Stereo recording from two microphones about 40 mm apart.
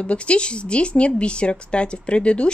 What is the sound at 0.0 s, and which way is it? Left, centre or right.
A woman's voice, left.